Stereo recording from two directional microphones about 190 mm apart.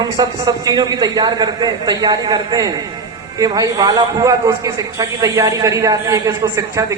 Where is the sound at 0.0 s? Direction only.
20° right (ahead or behind).